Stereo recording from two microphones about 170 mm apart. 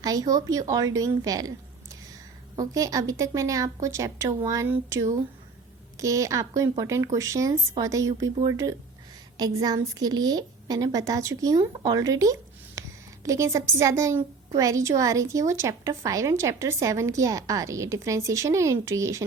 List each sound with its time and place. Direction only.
0.0 s a woman's voice: 20° right (ahead or behind)